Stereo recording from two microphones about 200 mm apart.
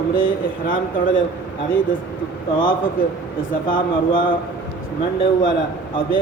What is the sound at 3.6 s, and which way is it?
Speech, 45° left (ahead or behind).